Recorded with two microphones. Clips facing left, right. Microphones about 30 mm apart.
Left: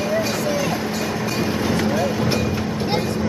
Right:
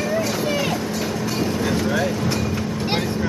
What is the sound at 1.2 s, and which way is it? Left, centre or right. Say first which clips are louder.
Vehicle: even; centre.